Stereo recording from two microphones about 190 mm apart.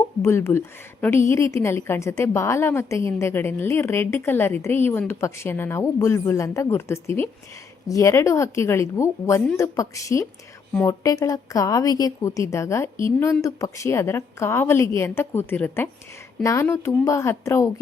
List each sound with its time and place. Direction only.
0.2 s a woman's voice: 15° left (ahead or behind)